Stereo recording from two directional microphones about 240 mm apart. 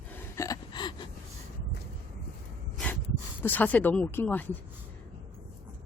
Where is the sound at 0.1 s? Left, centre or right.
Centre.